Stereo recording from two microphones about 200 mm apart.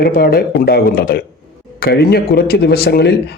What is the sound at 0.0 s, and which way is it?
Speech, 50° left (ahead or behind).